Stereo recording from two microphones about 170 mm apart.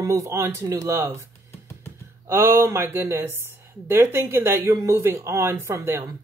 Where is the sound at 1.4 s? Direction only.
15° left (ahead or behind).